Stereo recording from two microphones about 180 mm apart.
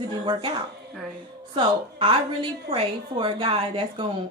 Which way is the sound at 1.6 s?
30° right (ahead or behind).